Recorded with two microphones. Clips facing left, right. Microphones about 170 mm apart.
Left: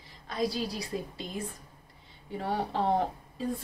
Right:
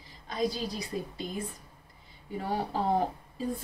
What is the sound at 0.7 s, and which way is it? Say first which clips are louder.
Speech: even; 30° left (ahead or behind).